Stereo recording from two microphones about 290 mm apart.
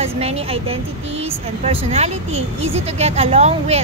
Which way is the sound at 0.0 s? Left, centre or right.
Right.